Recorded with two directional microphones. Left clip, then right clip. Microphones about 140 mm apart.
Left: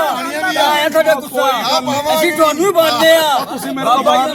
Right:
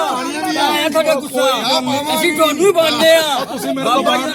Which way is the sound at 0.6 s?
35° left (ahead or behind).